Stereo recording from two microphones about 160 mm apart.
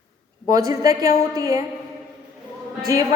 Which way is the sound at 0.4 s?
20° right (ahead or behind).